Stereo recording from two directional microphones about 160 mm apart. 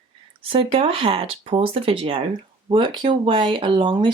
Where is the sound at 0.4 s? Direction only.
35° right (ahead or behind).